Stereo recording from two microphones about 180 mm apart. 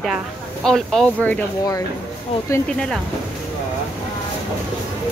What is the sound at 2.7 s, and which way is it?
Speech, 5° left (ahead or behind).